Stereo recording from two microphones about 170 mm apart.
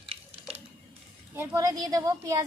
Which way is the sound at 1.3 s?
15° right (ahead or behind).